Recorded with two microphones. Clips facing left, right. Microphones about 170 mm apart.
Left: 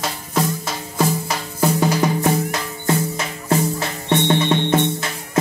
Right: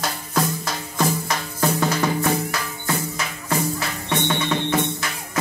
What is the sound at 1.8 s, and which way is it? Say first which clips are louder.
Music: left 4 dB; 15° left (ahead or behind).